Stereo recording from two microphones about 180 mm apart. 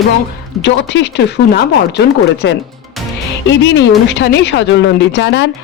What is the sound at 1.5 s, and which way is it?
Speech, 70° left (ahead or behind).